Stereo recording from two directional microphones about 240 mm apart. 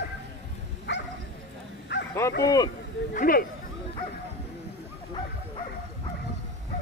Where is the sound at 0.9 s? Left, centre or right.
Left.